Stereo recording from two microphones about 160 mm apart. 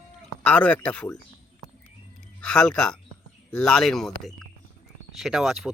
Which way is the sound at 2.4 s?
5° left (ahead or behind).